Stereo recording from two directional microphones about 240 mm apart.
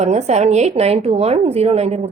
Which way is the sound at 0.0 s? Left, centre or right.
Right.